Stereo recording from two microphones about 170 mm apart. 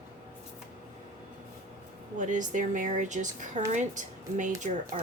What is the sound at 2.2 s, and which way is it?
Speech, 50° right (ahead or behind).